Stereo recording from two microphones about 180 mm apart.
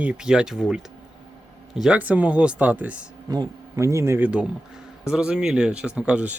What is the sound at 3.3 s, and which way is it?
Speech, 20° right (ahead or behind).